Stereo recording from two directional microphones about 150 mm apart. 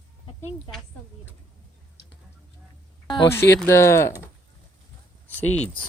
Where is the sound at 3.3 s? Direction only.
15° left (ahead or behind).